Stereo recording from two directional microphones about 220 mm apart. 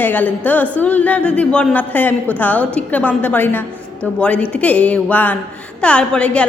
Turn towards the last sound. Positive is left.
turn(degrees=5)  # may be behind; listen again after turning